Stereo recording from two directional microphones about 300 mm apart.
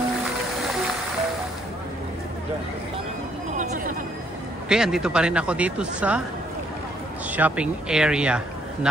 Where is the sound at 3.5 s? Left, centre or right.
Right.